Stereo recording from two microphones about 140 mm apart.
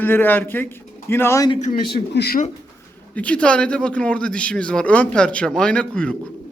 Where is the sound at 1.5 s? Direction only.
60° left (ahead or behind).